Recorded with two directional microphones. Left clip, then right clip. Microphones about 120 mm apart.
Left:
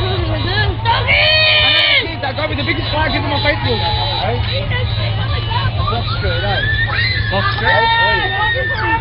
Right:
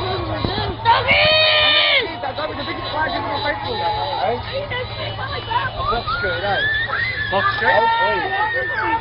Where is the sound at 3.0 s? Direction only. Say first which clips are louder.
Left 1 dB; 15° left (ahead or behind).